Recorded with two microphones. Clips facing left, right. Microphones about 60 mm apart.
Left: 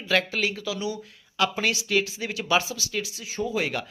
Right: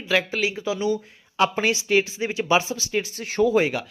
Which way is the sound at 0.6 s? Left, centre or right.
Right.